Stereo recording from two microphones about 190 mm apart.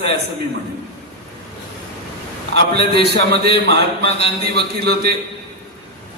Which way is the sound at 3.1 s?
60° right (ahead or behind).